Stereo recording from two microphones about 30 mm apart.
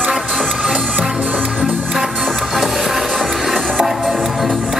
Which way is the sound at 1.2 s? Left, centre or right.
Right.